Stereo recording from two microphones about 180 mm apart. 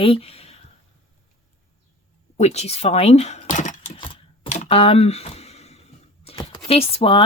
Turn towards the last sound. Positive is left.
turn(degrees=30)  # may be behind; listen again after turning